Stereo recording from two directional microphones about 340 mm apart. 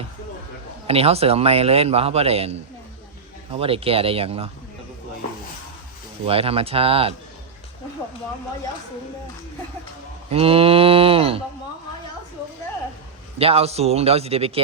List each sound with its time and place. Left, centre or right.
0.9 s a man's voice: centre
6.2 s a man's voice: centre
10.2 s a man's voice: centre
13.4 s a man's voice: centre